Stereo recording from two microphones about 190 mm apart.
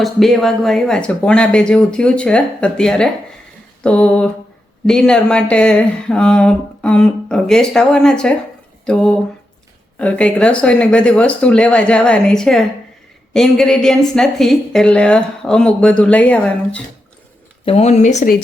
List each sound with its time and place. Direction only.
0.0 s speech: centre (ahead or behind)
3.8 s a sound: 5° left (ahead or behind)
4.9 s speech: 5° left (ahead or behind)
17.7 s speech: 35° left (ahead or behind)